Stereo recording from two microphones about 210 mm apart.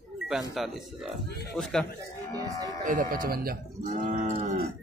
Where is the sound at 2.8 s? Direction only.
40° right (ahead or behind).